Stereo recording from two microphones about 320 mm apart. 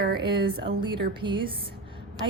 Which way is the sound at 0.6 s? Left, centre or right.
Centre.